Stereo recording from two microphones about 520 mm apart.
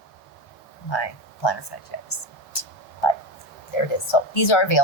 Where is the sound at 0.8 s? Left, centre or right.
Left.